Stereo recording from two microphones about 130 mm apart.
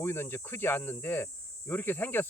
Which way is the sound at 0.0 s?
20° left (ahead or behind).